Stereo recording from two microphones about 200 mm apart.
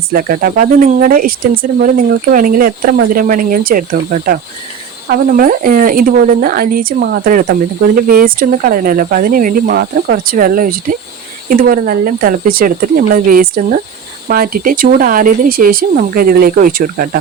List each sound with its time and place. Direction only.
0.1 s speech: 45° right (ahead or behind)
5.0 s speech: 45° right (ahead or behind)